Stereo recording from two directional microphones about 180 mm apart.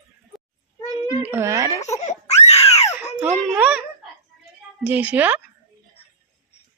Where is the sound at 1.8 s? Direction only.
40° left (ahead or behind).